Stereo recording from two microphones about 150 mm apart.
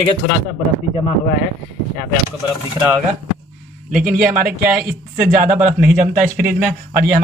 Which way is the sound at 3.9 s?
75° right (ahead or behind).